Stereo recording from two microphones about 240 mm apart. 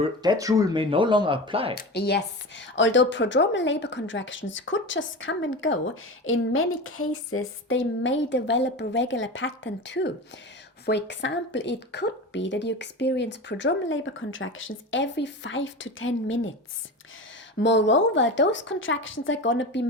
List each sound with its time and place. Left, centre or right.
0.0 s speech: centre
1.7 s a woman's voice: left
6.2 s a sound: left
7.1 s a woman's voice: left
17.6 s a woman's voice: left